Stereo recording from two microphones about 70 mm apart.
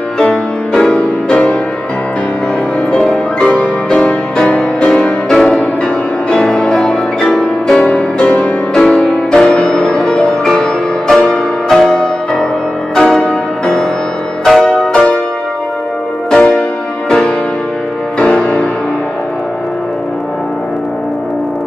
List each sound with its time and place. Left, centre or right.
0.2 s music: centre
2.9 s music: centre
16.3 s music: centre
18.2 s music: centre